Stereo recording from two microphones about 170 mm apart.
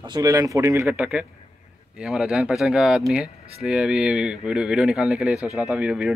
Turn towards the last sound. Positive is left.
turn(degrees=-5)  # may be behind; listen again after turning